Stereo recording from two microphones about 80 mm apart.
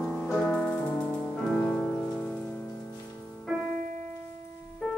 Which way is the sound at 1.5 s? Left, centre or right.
Centre.